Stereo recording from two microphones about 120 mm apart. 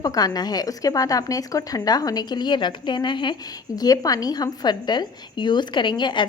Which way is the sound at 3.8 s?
30° left (ahead or behind).